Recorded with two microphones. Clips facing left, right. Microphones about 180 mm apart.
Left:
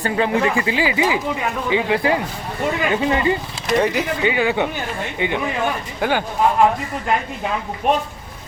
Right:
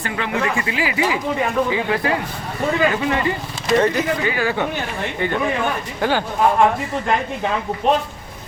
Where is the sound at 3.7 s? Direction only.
15° left (ahead or behind).